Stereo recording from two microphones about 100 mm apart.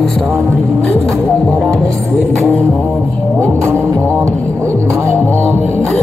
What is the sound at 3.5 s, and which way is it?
Music, 25° right (ahead or behind).